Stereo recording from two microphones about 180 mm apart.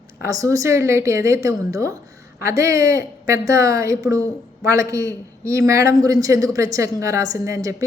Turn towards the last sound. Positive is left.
turn(degrees=-15)  # may be behind; listen again after turning